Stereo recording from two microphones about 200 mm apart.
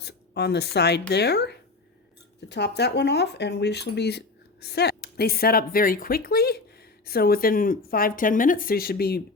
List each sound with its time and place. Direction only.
0.0 s speech: 55° left (ahead or behind)